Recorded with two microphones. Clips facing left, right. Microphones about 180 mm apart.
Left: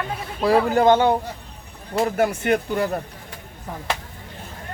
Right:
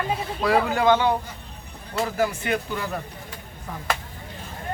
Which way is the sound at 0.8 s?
50° left (ahead or behind).